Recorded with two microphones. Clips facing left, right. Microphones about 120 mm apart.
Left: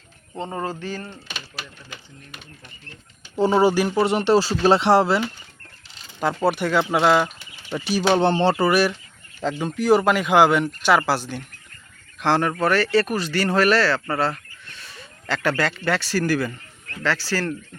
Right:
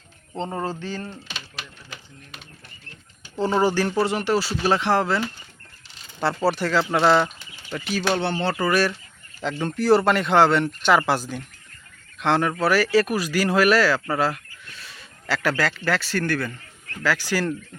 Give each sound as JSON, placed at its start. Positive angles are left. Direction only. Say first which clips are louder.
{"t": 0.3, "sound": "speech", "louder": "even", "side_deg": 5}
{"t": 3.3, "sound": "speech", "louder": "left 3 dB", "side_deg": 15}
{"t": 4.0, "sound": "speech", "louder": "left 4 dB", "side_deg": 25}
{"t": 6.1, "sound": "speech", "louder": "left 1 dB", "side_deg": 0}
{"t": 6.5, "sound": "speech", "louder": "left 1 dB", "side_deg": 15}
{"t": 7.7, "sound": "speech", "louder": "left 4 dB", "side_deg": 30}
{"t": 8.5, "sound": "speech", "louder": "left 3 dB", "side_deg": 20}
{"t": 9.4, "sound": "speech", "louder": "left 1 dB", "side_deg": 5}
{"t": 17.0, "sound": "speech", "louder": "right 1 dB", "side_deg": -10}